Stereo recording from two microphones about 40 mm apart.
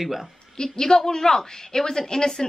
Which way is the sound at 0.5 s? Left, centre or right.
Centre.